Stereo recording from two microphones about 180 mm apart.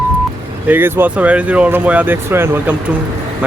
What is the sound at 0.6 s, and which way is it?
Speech, 10° right (ahead or behind).